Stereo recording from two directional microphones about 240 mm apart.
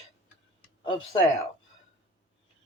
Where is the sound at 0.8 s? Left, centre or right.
Left.